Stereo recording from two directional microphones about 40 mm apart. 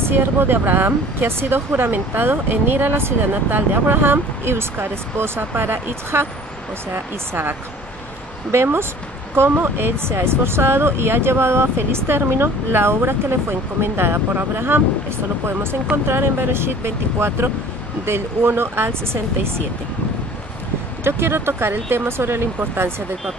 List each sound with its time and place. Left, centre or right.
0.1 s speech: right
3.0 s speech: right
3.4 s speech: right
5.6 s speech: right
6.9 s speech: right
8.5 s speech: right
21.0 s speech: right